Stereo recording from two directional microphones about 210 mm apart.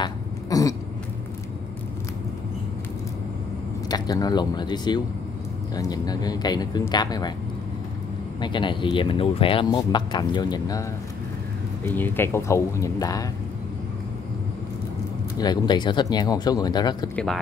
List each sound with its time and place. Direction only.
0.0 s throat clearing: 15° left (ahead or behind)
3.9 s speech: 20° left (ahead or behind)
8.4 s speech: 20° left (ahead or behind)
15.3 s speech: 20° left (ahead or behind)
17.1 s speech: 5° left (ahead or behind)